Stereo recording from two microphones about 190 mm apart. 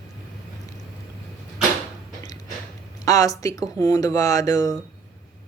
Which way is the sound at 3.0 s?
15° left (ahead or behind).